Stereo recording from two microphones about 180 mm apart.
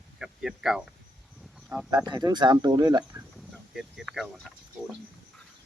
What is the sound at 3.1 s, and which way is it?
Speech, 5° right (ahead or behind).